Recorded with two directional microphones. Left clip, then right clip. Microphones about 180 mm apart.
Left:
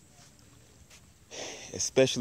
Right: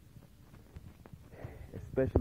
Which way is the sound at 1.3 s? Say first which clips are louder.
Left 13 dB; 45° left (ahead or behind).